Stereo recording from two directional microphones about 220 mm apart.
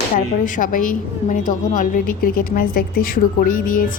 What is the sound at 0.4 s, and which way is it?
A woman's voice, 35° left (ahead or behind).